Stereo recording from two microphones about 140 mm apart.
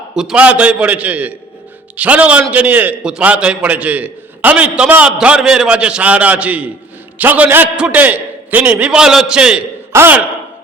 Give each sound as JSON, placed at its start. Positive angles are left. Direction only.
{"t": 0.2, "sound": "a man's voice", "side_deg": -5}